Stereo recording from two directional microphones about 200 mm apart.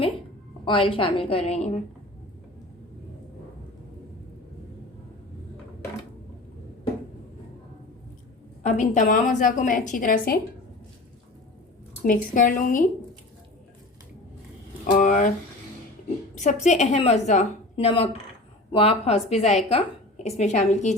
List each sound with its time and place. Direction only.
0.6 s a woman's voice: 25° left (ahead or behind)
8.6 s a woman's voice: 40° left (ahead or behind)
12.0 s a woman's voice: 45° left (ahead or behind)
14.8 s speech: 40° left (ahead or behind)
16.4 s a woman's voice: 35° left (ahead or behind)